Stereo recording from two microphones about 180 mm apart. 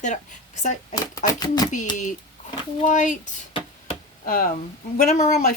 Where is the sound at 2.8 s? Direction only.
45° left (ahead or behind).